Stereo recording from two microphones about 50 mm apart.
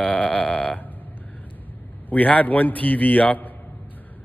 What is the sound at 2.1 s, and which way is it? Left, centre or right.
Speech, left.